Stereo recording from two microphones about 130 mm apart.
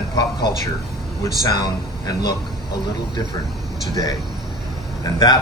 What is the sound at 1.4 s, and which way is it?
Speech, 35° left (ahead or behind).